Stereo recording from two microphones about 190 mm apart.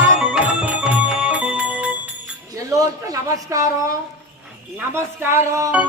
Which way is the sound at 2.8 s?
15° right (ahead or behind).